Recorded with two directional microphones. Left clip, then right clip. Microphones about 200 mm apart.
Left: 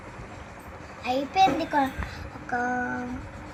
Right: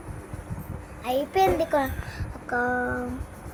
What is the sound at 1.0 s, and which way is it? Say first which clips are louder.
Speech: left 1 dB; 40° right (ahead or behind).